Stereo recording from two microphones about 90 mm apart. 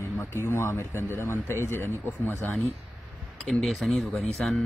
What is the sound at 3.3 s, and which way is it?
Speech, centre (ahead or behind).